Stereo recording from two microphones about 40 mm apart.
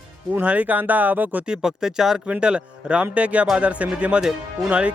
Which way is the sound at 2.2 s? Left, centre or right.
Right.